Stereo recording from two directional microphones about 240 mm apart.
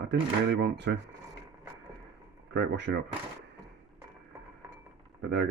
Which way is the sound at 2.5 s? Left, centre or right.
Right.